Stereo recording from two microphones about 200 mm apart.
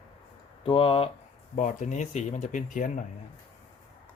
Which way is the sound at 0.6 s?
25° left (ahead or behind).